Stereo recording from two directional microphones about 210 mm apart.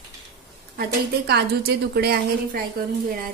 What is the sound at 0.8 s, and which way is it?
A woman's voice, 50° right (ahead or behind).